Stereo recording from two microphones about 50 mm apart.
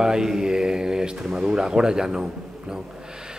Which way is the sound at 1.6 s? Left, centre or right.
Centre.